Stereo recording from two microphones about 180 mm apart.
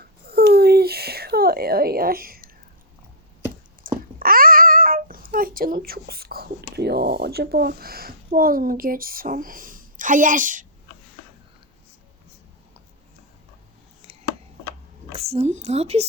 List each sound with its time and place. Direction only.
0.0 s a sound: 60° right (ahead or behind)
3.9 s babbling: 50° right (ahead or behind)
4.2 s a child's voice: 55° right (ahead or behind)
15.1 s speech: 35° right (ahead or behind)